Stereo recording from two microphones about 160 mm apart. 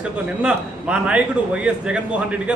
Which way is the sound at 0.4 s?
5° right (ahead or behind).